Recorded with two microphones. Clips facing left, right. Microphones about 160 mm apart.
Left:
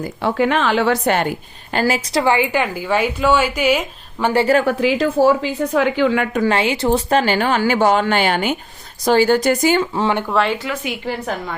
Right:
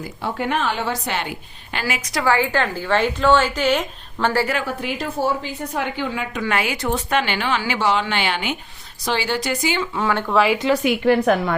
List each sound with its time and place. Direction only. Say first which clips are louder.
0.2 s a woman's voice: left 6 dB; 90° left
1.0 s speech: left 8 dB; 50° left (ahead or behind)
2.0 s a woman's voice: left 3 dB; 30° left (ahead or behind)
4.6 s a woman's voice: left 9 dB; 90° left
6.5 s speech: left 3 dB; 30° left (ahead or behind); by 9.9 s 45° left (ahead or behind)
9.9 s speech: left 3 dB; 30° left (ahead or behind)
10.2 s speech: right 1 dB; 5° right (ahead or behind)
10.8 s a woman's voice: right 10 dB; 65° right (ahead or behind)